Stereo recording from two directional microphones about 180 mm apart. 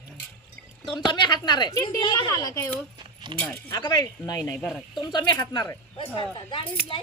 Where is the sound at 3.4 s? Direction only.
10° left (ahead or behind).